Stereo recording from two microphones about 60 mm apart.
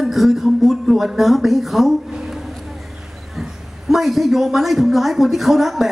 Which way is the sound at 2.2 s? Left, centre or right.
Centre.